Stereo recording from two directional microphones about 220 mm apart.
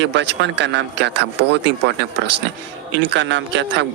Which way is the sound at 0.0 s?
55° right (ahead or behind).